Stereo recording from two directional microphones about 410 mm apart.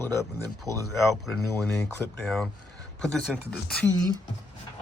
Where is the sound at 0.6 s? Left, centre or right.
Centre.